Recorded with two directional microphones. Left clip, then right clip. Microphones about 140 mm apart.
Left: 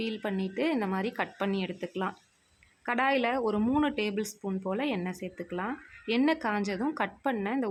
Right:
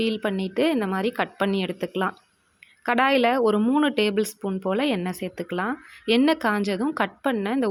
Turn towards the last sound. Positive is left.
turn(degrees=-30)  # may be behind; listen again after turning